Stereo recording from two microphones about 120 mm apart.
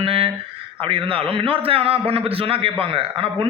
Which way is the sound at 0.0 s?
50° right (ahead or behind).